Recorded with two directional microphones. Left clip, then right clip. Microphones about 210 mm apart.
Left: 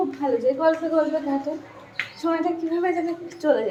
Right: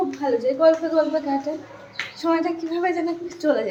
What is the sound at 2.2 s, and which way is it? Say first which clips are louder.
A woman's voice: right 2 dB; centre (ahead or behind).